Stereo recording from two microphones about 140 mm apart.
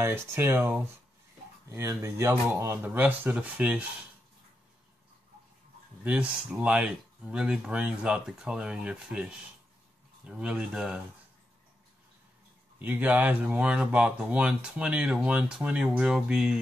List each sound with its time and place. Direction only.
0.0 s speech: 20° right (ahead or behind)
6.0 s speech: 10° right (ahead or behind)
12.7 s speech: 10° right (ahead or behind)